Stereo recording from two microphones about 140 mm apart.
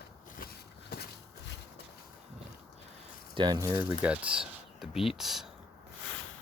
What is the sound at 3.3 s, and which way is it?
Speech, 30° right (ahead or behind).